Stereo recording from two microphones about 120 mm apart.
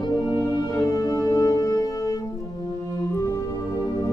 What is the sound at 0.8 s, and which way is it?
Music, 30° left (ahead or behind).